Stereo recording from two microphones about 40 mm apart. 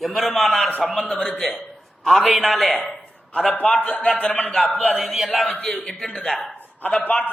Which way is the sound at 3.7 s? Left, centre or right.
Left.